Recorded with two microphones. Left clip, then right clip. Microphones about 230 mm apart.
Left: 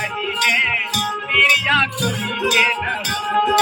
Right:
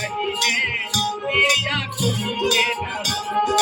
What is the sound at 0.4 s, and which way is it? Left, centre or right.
Music, centre.